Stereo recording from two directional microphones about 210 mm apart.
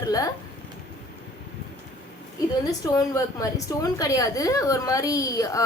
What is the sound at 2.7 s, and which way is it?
A woman's voice, 15° left (ahead or behind).